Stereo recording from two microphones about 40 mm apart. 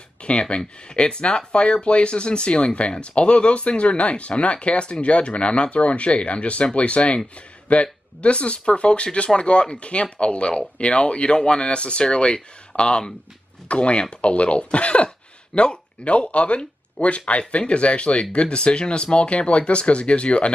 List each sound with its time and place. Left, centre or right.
0.2 s speech: left